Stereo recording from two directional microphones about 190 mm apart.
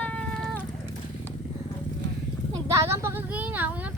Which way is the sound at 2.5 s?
15° right (ahead or behind).